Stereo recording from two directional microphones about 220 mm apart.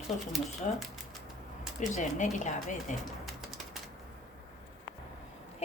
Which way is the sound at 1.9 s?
35° left (ahead or behind).